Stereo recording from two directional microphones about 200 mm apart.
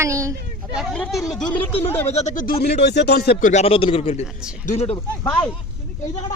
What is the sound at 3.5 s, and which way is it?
A man's voice, 30° left (ahead or behind).